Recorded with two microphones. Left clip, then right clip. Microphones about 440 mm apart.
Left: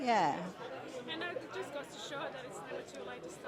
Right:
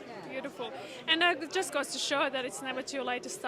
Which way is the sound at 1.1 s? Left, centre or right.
Right.